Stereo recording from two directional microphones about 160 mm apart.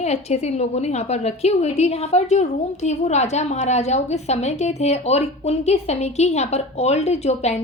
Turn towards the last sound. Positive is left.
turn(degrees=45)  # may be behind; listen again after turning